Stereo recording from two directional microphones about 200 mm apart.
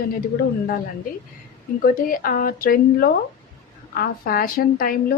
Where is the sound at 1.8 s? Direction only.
45° left (ahead or behind).